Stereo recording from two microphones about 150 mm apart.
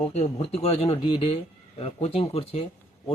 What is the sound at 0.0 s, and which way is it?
Speech, 50° left (ahead or behind).